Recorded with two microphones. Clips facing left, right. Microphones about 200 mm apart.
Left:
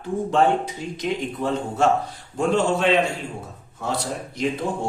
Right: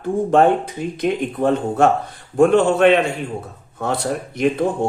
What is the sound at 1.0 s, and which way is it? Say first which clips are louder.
Speech: right 6 dB; 55° right (ahead or behind).